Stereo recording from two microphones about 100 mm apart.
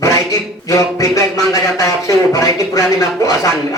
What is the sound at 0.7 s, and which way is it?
Music, 35° left (ahead or behind).